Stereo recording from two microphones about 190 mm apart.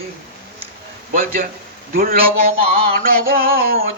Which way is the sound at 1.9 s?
50° right (ahead or behind).